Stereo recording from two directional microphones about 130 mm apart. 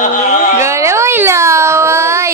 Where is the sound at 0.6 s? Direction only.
20° right (ahead or behind).